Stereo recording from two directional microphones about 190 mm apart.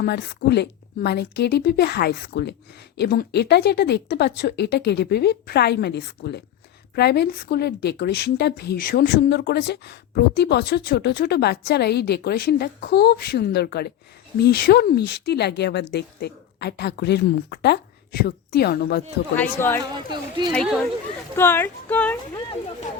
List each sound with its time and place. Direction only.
0.0 s a woman's voice: 60° left (ahead or behind)
19.4 s speech: 10° left (ahead or behind)
19.8 s speech: 25° right (ahead or behind)
20.5 s speech: 5° left (ahead or behind)